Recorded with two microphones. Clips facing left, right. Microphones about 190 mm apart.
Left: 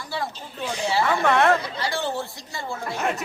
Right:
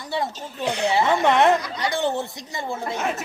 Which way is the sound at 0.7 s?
65° right (ahead or behind).